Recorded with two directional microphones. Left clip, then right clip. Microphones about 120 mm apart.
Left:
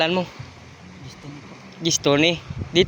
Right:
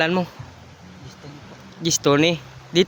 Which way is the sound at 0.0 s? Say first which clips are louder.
Even; 55° right (ahead or behind).